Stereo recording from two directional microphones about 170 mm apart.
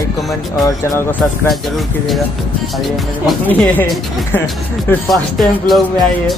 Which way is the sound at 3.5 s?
10° left (ahead or behind).